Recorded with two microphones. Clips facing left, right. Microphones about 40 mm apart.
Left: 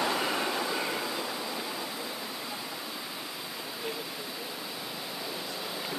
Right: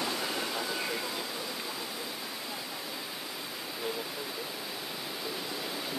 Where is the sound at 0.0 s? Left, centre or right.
Left.